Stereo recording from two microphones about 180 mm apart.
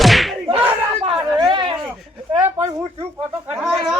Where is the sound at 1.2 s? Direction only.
25° right (ahead or behind).